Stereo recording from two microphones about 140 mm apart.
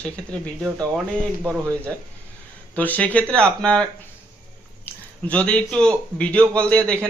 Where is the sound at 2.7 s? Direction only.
10° left (ahead or behind).